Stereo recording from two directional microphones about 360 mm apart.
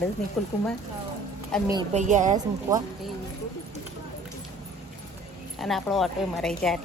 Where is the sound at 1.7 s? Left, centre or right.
Centre.